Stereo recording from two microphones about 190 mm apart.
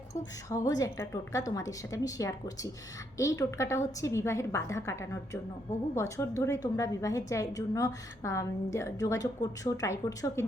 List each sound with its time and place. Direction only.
0.5 s a woman's voice: 20° left (ahead or behind)